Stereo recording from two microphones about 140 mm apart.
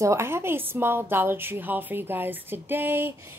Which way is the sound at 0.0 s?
20° right (ahead or behind).